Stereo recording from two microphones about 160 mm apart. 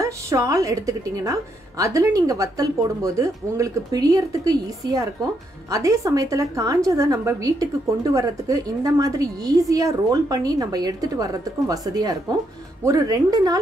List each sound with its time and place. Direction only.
0.0 s a woman's voice: 20° right (ahead or behind)